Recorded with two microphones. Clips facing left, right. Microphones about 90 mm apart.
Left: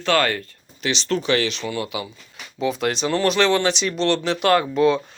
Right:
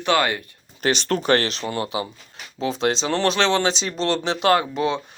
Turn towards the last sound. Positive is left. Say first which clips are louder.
# left 2 dB
turn(degrees=-20)  # may be behind; listen again after turning